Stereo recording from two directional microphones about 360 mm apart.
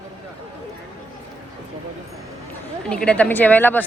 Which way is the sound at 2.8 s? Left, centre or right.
Centre.